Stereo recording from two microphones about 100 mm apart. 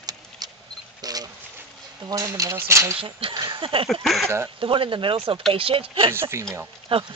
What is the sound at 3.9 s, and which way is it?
Speech, 5° left (ahead or behind).